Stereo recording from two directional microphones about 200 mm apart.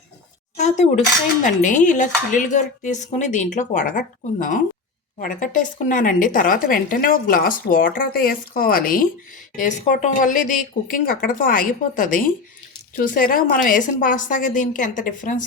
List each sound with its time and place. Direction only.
0.5 s a sound: 35° left (ahead or behind)
1.4 s speech: 40° left (ahead or behind)
5.4 s a woman's voice: 40° left (ahead or behind)